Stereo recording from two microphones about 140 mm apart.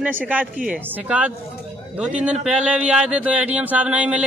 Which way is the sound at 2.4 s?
10° right (ahead or behind).